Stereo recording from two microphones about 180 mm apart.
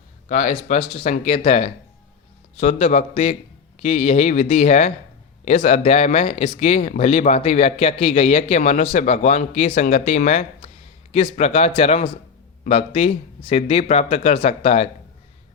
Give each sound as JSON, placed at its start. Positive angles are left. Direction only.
{"t": 0.3, "sound": "speech", "side_deg": 40}